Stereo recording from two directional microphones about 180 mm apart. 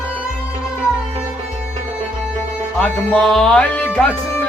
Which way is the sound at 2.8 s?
5° left (ahead or behind).